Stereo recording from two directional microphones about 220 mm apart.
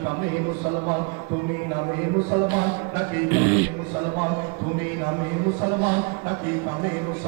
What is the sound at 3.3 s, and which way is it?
Music, 15° right (ahead or behind).